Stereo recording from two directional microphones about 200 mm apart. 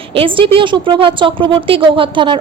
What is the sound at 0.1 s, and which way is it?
A woman's voice, 25° right (ahead or behind).